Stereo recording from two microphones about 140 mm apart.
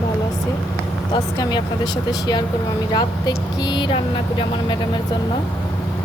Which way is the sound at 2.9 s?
30° left (ahead or behind).